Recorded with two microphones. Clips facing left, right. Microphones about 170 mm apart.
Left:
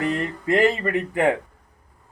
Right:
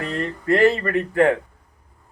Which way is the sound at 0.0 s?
15° left (ahead or behind).